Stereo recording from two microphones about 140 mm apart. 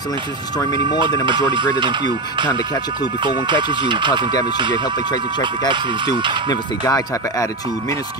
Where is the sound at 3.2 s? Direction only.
35° right (ahead or behind).